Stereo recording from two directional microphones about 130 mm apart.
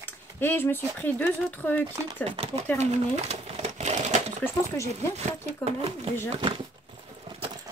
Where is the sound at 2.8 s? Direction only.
60° right (ahead or behind).